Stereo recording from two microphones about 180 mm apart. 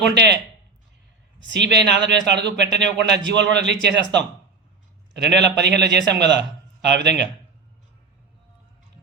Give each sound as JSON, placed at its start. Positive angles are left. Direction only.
{"t": 0.1, "sound": "a man's voice", "side_deg": -70}
{"t": 1.4, "sound": "a man's voice", "side_deg": -75}